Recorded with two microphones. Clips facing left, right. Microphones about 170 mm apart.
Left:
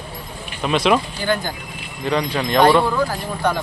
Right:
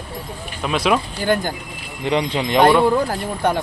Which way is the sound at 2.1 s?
20° right (ahead or behind).